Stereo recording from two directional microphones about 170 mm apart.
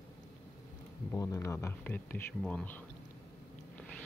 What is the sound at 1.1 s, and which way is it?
Speech, 20° left (ahead or behind).